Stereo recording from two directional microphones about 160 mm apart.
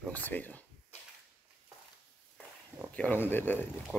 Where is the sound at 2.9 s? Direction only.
10° left (ahead or behind).